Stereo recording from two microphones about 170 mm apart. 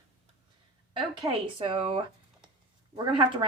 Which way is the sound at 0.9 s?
30° right (ahead or behind).